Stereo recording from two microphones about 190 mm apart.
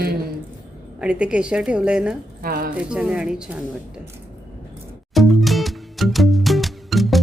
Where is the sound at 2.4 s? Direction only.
50° right (ahead or behind).